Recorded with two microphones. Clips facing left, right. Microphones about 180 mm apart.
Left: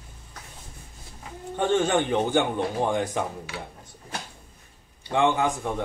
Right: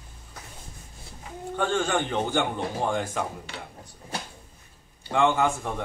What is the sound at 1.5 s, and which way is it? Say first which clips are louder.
Speech: left 3 dB; 20° left (ahead or behind).